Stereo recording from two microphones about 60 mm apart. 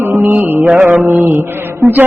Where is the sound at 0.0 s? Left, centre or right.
Right.